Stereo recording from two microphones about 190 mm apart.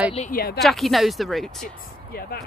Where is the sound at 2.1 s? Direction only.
55° left (ahead or behind).